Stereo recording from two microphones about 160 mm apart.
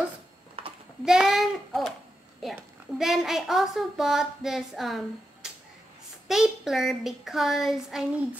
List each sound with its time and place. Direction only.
0.6 s a sound: 35° right (ahead or behind)
1.0 s child singing: 5° right (ahead or behind)
2.4 s a woman's voice: centre (ahead or behind)